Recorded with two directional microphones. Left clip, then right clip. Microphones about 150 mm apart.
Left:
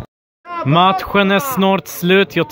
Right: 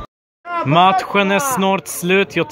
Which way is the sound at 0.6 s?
10° right (ahead or behind).